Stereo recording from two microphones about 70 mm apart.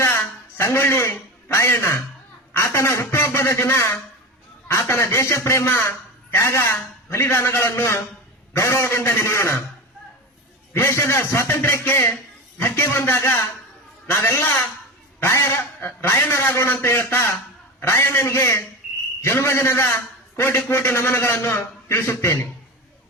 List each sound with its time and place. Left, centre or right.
0.0 s a sound: left
1.5 s a man's voice: left
10.8 s a man's voice: left